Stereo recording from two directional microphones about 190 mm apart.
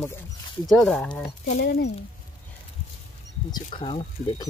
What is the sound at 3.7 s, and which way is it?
Speech, 30° left (ahead or behind).